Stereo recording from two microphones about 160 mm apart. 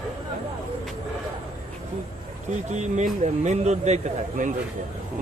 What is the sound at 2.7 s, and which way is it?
Speech, 50° right (ahead or behind).